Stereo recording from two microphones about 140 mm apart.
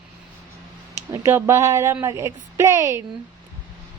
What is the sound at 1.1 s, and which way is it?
Speech, 20° right (ahead or behind).